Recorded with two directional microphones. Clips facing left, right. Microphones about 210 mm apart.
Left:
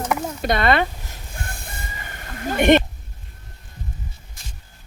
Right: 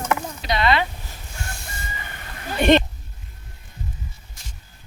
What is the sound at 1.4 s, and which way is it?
Chicken, 55° left (ahead or behind).